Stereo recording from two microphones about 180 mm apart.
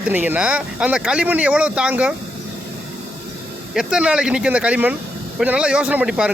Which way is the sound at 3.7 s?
5° right (ahead or behind).